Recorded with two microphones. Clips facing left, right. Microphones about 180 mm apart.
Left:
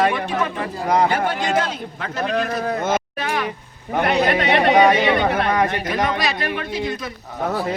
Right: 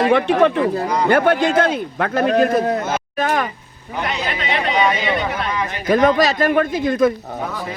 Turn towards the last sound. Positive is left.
turn(degrees=-50)  # may be behind; listen again after turning